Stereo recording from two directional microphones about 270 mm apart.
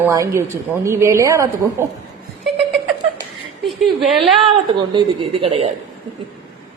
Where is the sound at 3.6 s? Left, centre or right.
Centre.